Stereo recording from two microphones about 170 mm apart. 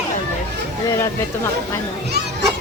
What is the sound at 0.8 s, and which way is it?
Speech, 20° left (ahead or behind).